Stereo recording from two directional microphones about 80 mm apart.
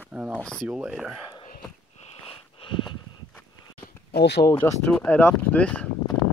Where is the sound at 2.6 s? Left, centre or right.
Left.